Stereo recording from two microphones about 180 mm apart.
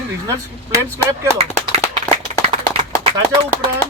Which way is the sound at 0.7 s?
15° right (ahead or behind).